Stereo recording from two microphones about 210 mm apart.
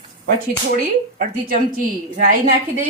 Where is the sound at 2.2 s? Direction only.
45° right (ahead or behind).